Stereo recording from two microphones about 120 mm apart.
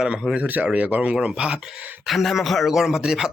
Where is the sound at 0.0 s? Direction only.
5° right (ahead or behind).